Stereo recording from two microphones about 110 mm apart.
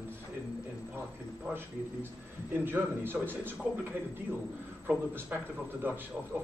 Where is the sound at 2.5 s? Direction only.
20° right (ahead or behind).